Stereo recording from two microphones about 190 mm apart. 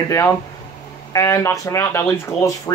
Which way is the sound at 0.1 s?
15° left (ahead or behind).